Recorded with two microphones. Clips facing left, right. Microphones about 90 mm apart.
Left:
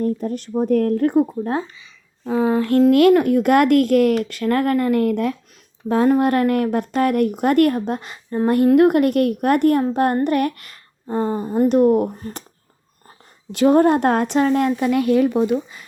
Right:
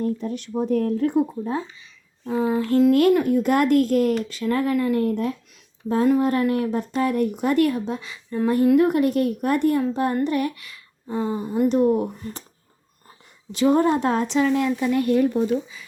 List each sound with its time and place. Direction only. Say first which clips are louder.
0.0 s a woman's voice: left 3 dB; 45° left (ahead or behind)
0.6 s speech: left 4 dB; 55° left (ahead or behind)
1.8 s speech: left 3 dB; 75° left (ahead or behind)
2.9 s speech: left 4 dB; 80° left
6.1 s speech: left 3 dB; 70° left (ahead or behind); by 8.4 s 45° left (ahead or behind)
8.4 s a woman's voice: left 4 dB; 60° left (ahead or behind); by 11.7 s 45° left (ahead or behind)
11.7 s speech: left 5 dB; 60° left (ahead or behind)
13.5 s speech: left 4 dB; 55° left (ahead or behind)